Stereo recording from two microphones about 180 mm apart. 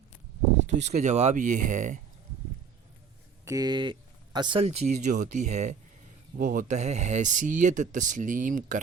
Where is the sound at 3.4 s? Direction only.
20° right (ahead or behind); by 8.8 s 45° right (ahead or behind).